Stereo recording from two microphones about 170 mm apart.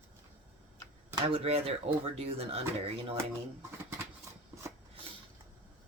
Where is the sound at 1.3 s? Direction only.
35° right (ahead or behind).